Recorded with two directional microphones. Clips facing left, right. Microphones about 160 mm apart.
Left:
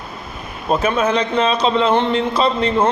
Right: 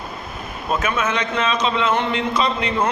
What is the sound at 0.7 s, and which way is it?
A man's voice, 35° left (ahead or behind).